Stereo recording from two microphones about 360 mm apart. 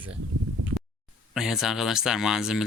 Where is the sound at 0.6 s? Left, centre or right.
Right.